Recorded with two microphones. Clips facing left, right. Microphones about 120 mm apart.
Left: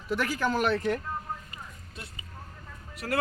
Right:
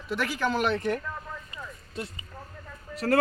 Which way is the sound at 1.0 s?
90° right.